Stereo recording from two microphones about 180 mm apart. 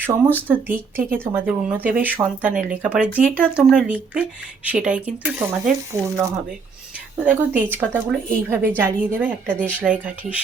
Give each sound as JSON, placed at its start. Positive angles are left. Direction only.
{"t": 0.3, "sound": "a woman's voice", "side_deg": -10}